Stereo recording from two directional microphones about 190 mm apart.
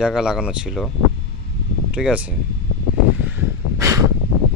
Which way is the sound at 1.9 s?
5° right (ahead or behind).